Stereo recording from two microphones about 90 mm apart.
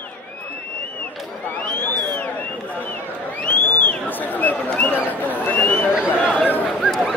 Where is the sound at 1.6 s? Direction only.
15° left (ahead or behind).